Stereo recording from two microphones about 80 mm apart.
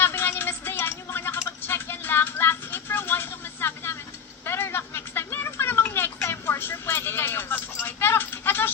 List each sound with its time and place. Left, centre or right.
0.0 s music: left
4.4 s a sound: left
6.2 s vehicle: left
7.9 s keys jangling: left